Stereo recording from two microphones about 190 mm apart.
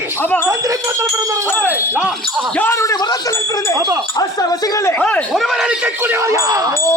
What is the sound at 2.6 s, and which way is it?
Basketball bounce, 15° left (ahead or behind).